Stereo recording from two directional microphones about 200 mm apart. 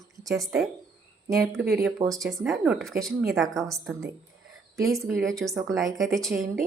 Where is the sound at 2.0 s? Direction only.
15° right (ahead or behind).